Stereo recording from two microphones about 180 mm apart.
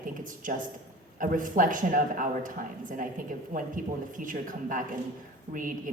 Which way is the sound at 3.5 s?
45° right (ahead or behind).